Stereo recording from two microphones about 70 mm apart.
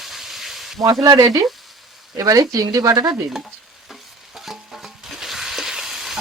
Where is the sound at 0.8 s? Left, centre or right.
Right.